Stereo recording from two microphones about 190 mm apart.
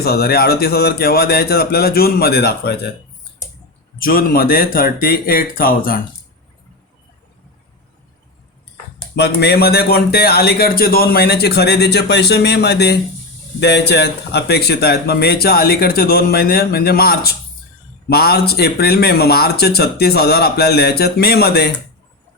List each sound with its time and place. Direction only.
0.0 s a man's voice: 55° left (ahead or behind)
4.0 s speech: 50° left (ahead or behind)
9.1 s a man's voice: 60° left (ahead or behind)